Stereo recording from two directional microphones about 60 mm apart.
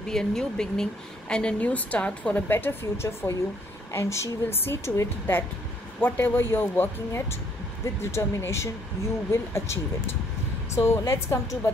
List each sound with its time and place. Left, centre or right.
0.1 s speech: centre
2.4 s a woman's voice: left
7.8 s a woman's voice: left